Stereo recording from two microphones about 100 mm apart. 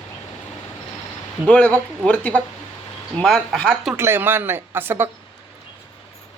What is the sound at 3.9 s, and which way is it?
Speech, 25° right (ahead or behind).